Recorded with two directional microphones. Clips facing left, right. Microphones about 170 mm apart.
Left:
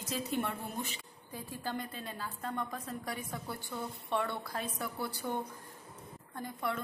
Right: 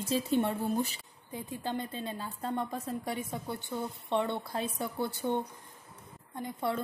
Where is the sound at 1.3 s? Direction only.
20° right (ahead or behind).